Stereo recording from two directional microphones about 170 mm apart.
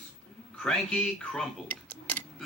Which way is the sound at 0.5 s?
5° left (ahead or behind).